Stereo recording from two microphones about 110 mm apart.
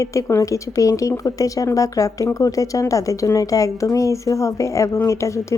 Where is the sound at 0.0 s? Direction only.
30° left (ahead or behind).